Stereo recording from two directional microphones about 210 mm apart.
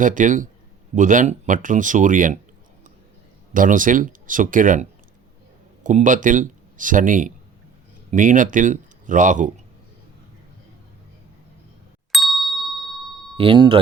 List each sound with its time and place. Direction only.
0.0 s speech: 40° right (ahead or behind)
3.5 s speech: 40° right (ahead or behind)
12.1 s ding: centre (ahead or behind)
13.3 s speech: 25° right (ahead or behind)